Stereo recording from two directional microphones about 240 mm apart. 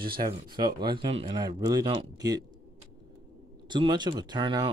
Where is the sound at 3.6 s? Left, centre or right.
Centre.